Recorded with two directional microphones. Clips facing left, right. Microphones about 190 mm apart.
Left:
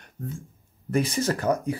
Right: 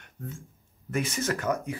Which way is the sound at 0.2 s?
40° left (ahead or behind).